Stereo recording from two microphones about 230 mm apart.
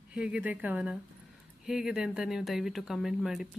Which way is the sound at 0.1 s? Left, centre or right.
Centre.